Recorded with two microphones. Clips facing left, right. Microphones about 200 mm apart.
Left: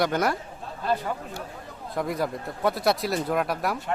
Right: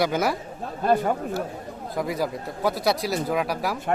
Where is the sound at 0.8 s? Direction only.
50° right (ahead or behind).